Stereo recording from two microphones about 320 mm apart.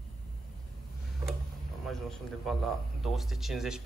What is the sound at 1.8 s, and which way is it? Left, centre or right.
A man's voice, centre.